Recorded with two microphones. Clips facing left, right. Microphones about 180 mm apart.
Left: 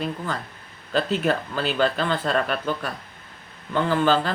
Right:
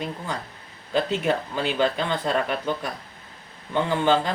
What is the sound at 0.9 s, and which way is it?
Speech, 15° right (ahead or behind).